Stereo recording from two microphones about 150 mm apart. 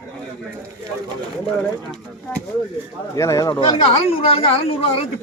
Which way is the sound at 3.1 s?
20° left (ahead or behind).